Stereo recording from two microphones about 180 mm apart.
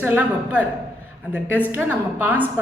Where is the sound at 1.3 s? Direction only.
10° right (ahead or behind).